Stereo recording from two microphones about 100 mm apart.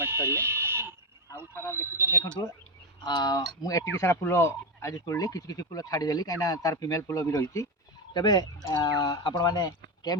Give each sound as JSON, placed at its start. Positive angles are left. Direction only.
{"t": 0.0, "sound": "fire alarm", "side_deg": -25}
{"t": 2.1, "sound": "speech", "side_deg": 35}
{"t": 8.1, "sound": "speech", "side_deg": 45}